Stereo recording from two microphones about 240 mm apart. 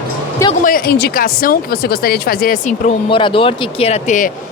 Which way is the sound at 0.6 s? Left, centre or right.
Left.